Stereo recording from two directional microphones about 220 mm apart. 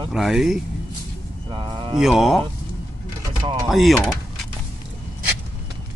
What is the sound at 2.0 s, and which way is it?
Speech, centre (ahead or behind).